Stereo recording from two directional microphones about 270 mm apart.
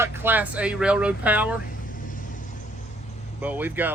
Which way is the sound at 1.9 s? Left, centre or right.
Left.